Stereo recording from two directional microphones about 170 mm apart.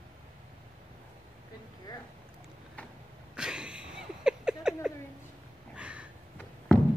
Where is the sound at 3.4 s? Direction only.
5° right (ahead or behind).